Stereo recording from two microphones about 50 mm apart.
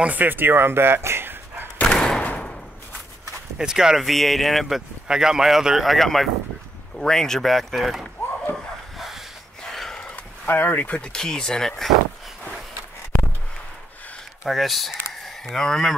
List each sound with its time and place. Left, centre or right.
0.0 s speech: right
1.8 s thump: centre
2.2 s a sound: left
3.5 s speech: centre
4.0 s speech: centre
5.0 s speech: centre
5.9 s speech: centre
8.9 s dog: centre
9.6 s gasp: centre
9.9 s a sound: left
10.4 s speech: left
11.1 s speech: centre
14.4 s a sound: centre
15.5 s speech: centre